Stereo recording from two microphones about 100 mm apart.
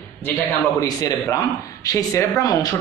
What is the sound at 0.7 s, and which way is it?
Speech, 35° left (ahead or behind).